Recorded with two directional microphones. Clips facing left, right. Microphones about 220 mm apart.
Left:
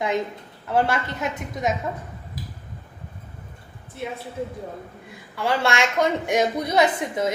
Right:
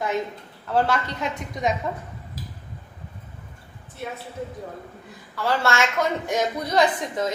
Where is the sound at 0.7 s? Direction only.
5° left (ahead or behind).